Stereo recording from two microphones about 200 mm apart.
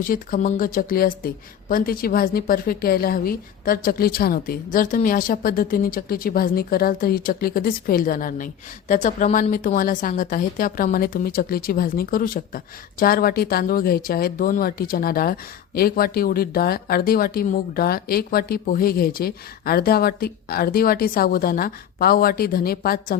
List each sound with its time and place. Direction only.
0.0 s a woman's voice: 45° left (ahead or behind)